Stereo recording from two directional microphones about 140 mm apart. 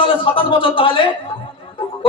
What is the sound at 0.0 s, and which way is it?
A man's voice, 40° left (ahead or behind).